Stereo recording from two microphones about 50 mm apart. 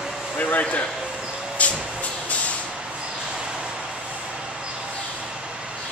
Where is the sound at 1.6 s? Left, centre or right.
Left.